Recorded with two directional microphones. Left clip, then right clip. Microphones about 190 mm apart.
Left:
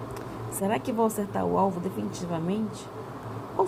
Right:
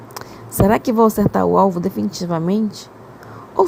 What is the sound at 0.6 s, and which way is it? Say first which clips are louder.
A woman's voice: right 12 dB; 55° right (ahead or behind).